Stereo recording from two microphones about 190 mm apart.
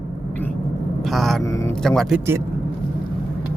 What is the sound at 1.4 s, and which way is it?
Speech, 15° left (ahead or behind).